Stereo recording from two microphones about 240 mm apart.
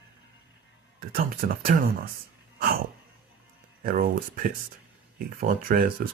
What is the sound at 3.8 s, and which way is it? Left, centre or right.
Speech, right.